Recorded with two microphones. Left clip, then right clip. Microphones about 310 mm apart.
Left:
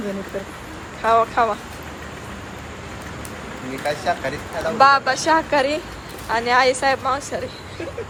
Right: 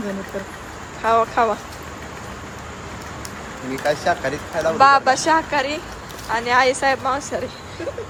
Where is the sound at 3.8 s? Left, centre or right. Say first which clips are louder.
Right 3 dB; right.